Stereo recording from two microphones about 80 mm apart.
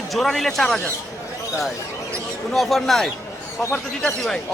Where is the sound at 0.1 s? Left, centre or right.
Centre.